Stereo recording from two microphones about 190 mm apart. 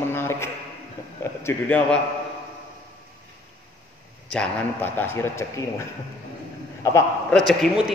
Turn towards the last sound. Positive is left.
turn(degrees=0)  # may be behind; listen again after turning